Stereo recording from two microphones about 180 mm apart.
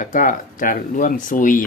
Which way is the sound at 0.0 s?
45° left (ahead or behind).